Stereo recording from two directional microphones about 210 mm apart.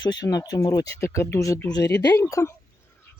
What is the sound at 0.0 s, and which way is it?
Speech, 20° left (ahead or behind).